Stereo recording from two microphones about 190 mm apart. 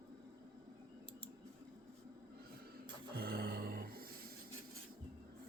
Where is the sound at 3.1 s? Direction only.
55° right (ahead or behind).